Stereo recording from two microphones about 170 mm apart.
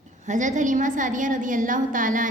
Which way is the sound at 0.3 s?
45° right (ahead or behind).